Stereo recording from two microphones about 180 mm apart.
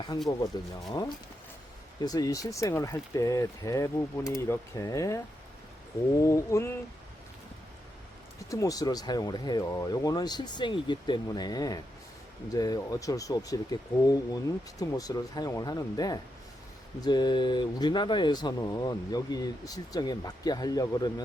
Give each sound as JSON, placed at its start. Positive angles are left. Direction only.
{"t": 0.1, "sound": "speech", "side_deg": 25}
{"t": 2.0, "sound": "speech", "side_deg": 20}
{"t": 8.4, "sound": "speech", "side_deg": 20}